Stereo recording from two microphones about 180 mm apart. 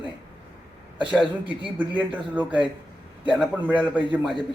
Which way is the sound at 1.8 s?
10° right (ahead or behind).